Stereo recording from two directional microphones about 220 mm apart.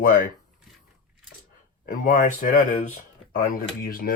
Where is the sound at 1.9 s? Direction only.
35° left (ahead or behind).